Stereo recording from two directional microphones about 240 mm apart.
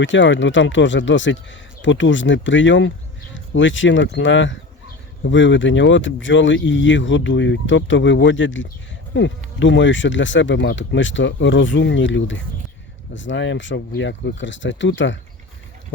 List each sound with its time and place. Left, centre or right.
0.0 s speech: left